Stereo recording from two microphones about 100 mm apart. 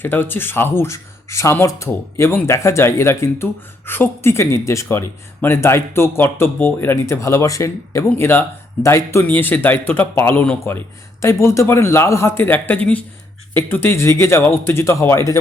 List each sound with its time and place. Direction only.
0.0 s speech: 20° left (ahead or behind)